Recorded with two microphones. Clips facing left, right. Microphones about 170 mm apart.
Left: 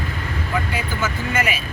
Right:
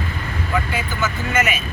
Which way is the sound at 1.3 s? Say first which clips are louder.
Right 3 dB; 35° left (ahead or behind).